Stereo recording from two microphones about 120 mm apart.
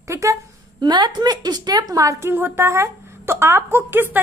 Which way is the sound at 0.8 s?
35° right (ahead or behind).